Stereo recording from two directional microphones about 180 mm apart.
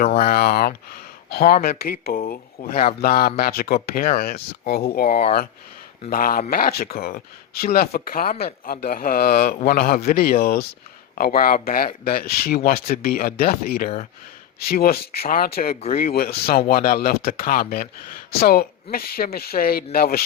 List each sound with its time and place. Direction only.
0.1 s a man's voice: 50° left (ahead or behind)